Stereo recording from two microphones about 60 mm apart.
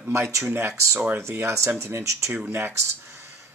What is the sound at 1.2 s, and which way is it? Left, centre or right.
Speech, right.